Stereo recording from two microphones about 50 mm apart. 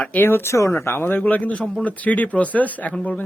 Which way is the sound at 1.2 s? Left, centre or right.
Left.